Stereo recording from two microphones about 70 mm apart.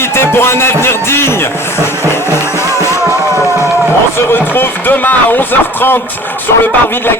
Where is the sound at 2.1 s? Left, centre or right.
Left.